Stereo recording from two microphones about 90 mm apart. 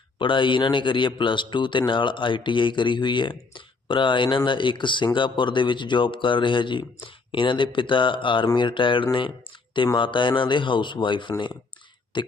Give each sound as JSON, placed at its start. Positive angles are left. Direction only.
{"t": 0.2, "sound": "speech", "side_deg": 65}